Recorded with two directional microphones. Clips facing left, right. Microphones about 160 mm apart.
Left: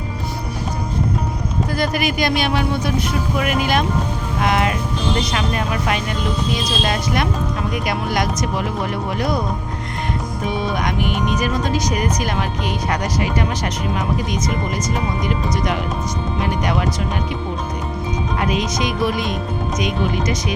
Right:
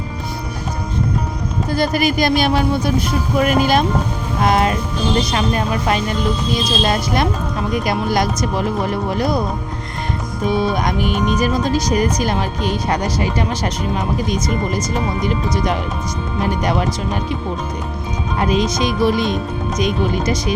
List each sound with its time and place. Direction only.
1.7 s speech: 30° right (ahead or behind)
10.4 s speech: 35° right (ahead or behind)
14.7 s speech: 30° right (ahead or behind)
18.3 s speech: 30° right (ahead or behind)